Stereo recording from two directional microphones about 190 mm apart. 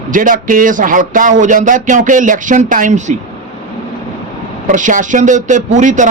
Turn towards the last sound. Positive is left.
turn(degrees=-40)  # may be behind; listen again after turning